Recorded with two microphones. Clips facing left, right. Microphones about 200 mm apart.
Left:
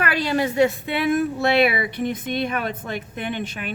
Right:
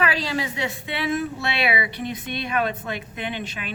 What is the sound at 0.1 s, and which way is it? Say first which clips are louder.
A woman's voice: left 5 dB; 55° left (ahead or behind).